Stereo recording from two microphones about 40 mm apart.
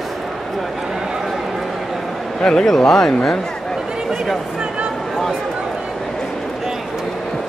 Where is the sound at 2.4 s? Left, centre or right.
Centre.